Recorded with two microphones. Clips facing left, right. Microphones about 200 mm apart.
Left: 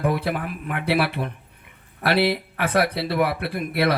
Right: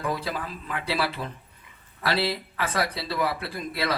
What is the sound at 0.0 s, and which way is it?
Speech, 60° left (ahead or behind).